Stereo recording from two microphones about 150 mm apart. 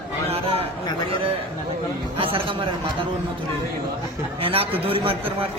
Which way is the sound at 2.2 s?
35° right (ahead or behind).